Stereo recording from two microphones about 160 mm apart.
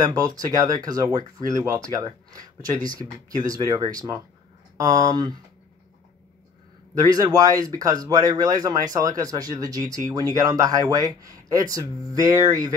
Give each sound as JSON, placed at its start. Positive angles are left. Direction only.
{"t": 0.0, "sound": "speech", "side_deg": -25}
{"t": 7.0, "sound": "speech", "side_deg": -25}